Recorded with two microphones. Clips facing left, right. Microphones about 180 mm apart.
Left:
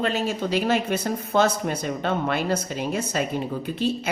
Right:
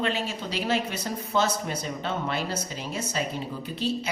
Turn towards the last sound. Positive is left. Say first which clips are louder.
# left 4 dB
turn(degrees=55)  # may be behind; listen again after turning